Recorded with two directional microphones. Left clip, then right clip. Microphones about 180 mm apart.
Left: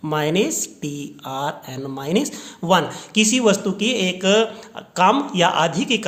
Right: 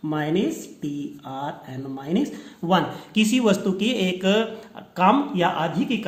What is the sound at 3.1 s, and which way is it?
Speech, 15° left (ahead or behind).